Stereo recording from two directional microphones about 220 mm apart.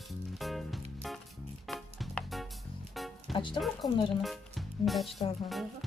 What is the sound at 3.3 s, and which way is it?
Speech, 20° left (ahead or behind).